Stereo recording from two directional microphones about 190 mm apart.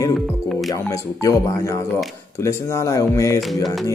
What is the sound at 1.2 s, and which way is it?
Speech, 15° left (ahead or behind).